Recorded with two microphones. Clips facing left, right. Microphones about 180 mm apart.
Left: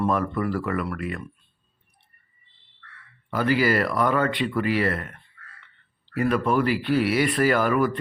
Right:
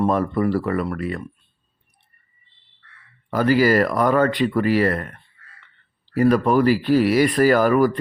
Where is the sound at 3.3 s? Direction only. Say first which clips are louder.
Right 5 dB; 40° right (ahead or behind).